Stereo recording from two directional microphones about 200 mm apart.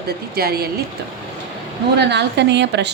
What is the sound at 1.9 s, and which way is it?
Speech, 60° right (ahead or behind).